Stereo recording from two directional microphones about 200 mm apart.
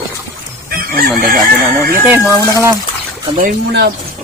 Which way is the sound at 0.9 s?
45° right (ahead or behind).